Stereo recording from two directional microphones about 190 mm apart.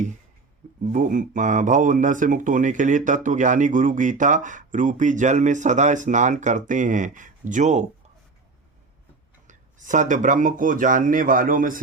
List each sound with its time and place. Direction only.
0.9 s speech: 45° right (ahead or behind)
9.5 s speech: 40° right (ahead or behind)